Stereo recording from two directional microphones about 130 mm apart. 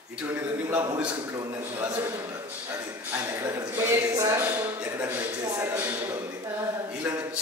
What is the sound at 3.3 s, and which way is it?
Speech, 20° right (ahead or behind).